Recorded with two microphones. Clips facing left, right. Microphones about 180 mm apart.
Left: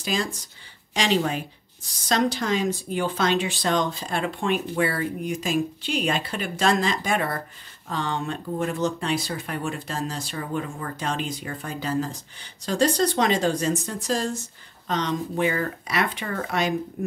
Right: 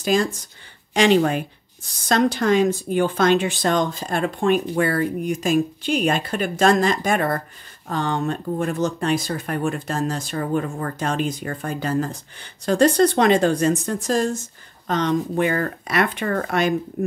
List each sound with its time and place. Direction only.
0.0 s speech: 50° right (ahead or behind)